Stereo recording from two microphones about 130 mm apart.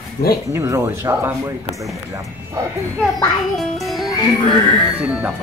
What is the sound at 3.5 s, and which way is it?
Music, centre (ahead or behind).